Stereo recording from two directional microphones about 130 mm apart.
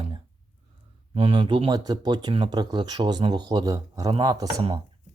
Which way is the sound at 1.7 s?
30° right (ahead or behind).